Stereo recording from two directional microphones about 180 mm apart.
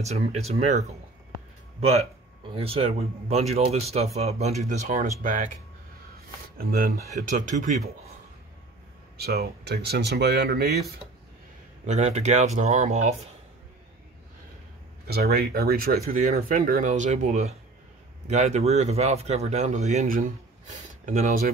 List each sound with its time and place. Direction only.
0.0 s a man's voice: 40° right (ahead or behind)
6.1 s a sound: 55° right (ahead or behind)
7.2 s speech: 45° right (ahead or behind)
9.1 s speech: 60° right (ahead or behind)
11.8 s a man's voice: 40° right (ahead or behind)
15.0 s a man's voice: 60° right (ahead or behind)